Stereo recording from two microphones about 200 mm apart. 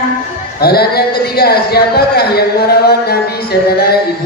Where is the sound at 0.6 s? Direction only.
50° left (ahead or behind).